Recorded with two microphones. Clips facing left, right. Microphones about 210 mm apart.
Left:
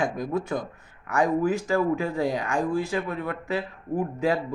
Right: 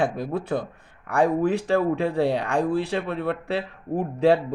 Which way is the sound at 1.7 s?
35° right (ahead or behind).